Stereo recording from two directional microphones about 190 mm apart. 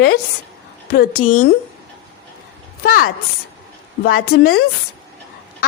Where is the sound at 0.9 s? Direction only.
50° left (ahead or behind).